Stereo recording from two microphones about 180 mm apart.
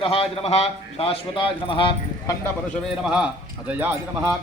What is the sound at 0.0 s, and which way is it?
A man's voice, 30° left (ahead or behind).